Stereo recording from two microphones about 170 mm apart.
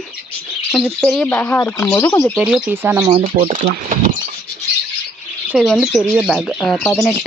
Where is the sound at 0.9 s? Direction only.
5° left (ahead or behind).